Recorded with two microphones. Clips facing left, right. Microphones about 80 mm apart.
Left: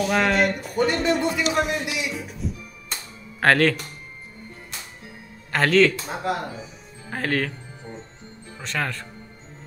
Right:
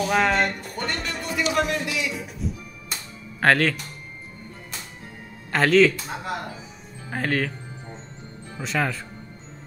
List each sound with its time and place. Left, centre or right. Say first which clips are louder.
0.0 s speech: left 1 dB; centre
2.1 s music: even; centre
5.5 s speech: right 1 dB; centre
8.5 s speech: right 3 dB; centre